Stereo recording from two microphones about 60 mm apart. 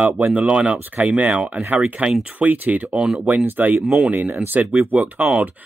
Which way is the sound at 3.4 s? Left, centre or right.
Right.